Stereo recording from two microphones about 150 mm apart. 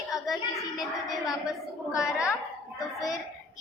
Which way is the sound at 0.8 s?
5° right (ahead or behind).